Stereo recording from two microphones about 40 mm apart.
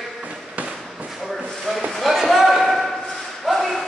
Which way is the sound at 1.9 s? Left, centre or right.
Centre.